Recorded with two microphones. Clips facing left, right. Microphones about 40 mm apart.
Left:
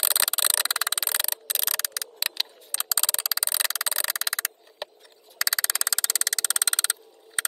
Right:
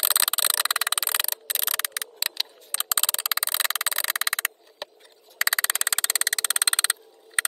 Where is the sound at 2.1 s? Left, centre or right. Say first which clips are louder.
Left 1 dB; centre.